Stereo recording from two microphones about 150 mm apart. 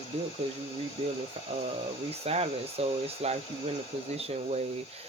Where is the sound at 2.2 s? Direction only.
40° right (ahead or behind).